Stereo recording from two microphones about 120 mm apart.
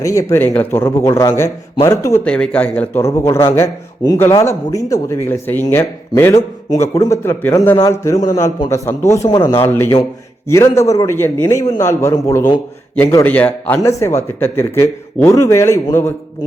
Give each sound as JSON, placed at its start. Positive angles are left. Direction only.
{"t": 0.0, "sound": "a man's voice", "side_deg": 25}
{"t": 2.2, "sound": "speech", "side_deg": 10}
{"t": 4.4, "sound": "a man's voice", "side_deg": 25}
{"t": 13.2, "sound": "speech", "side_deg": 15}
{"t": 13.7, "sound": "a man's voice", "side_deg": 25}